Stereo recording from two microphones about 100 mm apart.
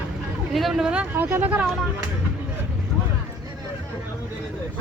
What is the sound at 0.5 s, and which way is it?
Speech, centre (ahead or behind).